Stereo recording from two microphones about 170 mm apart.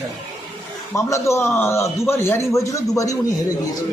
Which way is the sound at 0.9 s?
20° left (ahead or behind).